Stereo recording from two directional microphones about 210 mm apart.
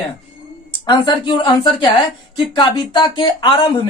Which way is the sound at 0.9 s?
20° left (ahead or behind).